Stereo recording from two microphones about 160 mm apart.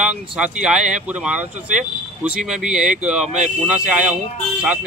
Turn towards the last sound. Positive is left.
turn(degrees=-5)  # may be behind; listen again after turning